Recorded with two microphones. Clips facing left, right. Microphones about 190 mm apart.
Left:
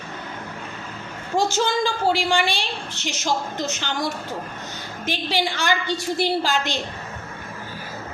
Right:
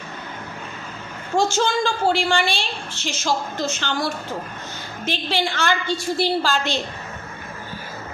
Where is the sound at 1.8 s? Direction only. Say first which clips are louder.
Right 1 dB; 15° left (ahead or behind).